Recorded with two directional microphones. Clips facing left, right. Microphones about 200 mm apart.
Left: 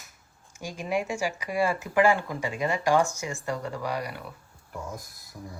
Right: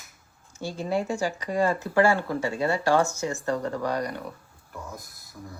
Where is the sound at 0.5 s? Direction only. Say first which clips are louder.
Right 2 dB; 15° left (ahead or behind).